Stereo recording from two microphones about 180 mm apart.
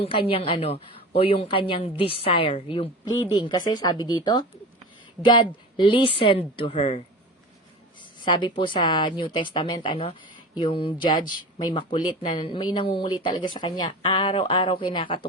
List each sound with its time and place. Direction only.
0.0 s a woman's voice: 30° left (ahead or behind)
8.2 s speech: 25° left (ahead or behind)